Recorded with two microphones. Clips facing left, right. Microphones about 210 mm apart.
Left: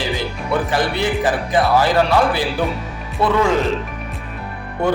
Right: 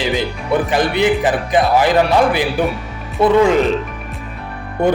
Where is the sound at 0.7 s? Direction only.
20° right (ahead or behind).